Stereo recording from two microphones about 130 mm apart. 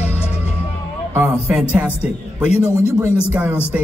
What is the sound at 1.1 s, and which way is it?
Music, 10° right (ahead or behind).